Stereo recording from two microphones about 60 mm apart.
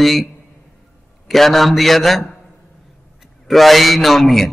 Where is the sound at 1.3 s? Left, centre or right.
Centre.